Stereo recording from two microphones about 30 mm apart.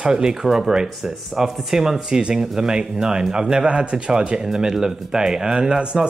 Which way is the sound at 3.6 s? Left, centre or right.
Right.